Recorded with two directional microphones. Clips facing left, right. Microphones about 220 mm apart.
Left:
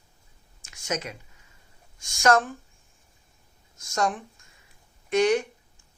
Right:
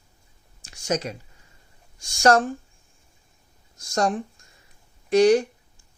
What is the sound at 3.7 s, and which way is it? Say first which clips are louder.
Speech: right 4 dB; 35° right (ahead or behind).